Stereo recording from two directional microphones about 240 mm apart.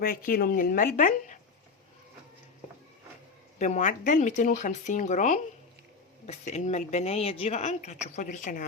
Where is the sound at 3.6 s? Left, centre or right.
Left.